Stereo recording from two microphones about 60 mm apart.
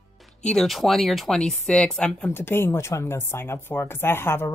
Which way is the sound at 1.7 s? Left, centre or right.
Centre.